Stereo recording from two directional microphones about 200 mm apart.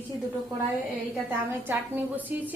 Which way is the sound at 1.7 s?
10° right (ahead or behind).